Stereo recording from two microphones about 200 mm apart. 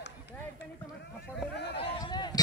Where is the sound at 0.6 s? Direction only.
60° left (ahead or behind).